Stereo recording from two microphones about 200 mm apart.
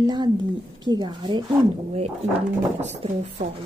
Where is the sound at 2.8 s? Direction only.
35° right (ahead or behind).